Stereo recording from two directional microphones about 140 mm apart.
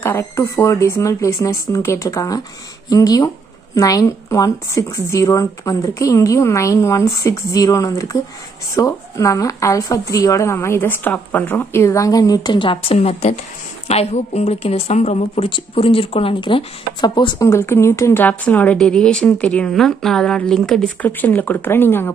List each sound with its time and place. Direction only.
0.0 s a woman's voice: 15° left (ahead or behind); by 17.5 s 35° left (ahead or behind)
17.5 s speech: 20° left (ahead or behind)